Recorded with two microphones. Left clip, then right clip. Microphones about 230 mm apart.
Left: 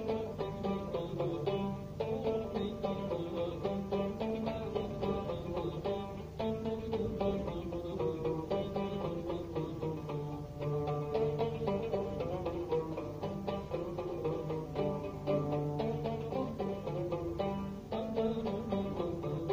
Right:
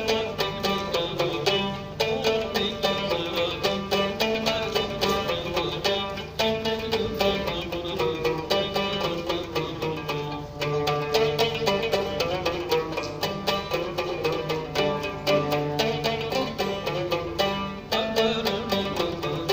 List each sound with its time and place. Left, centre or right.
0.0 s music: centre
10.6 s music: centre